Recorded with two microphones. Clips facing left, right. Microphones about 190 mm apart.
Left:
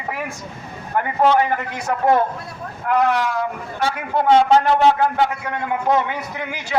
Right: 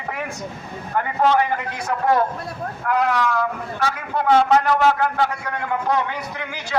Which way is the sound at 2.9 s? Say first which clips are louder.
Left 2 dB; 25° left (ahead or behind).